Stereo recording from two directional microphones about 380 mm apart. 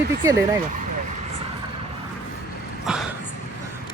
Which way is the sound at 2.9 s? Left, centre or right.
Centre.